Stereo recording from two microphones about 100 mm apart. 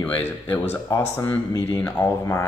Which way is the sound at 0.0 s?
20° left (ahead or behind).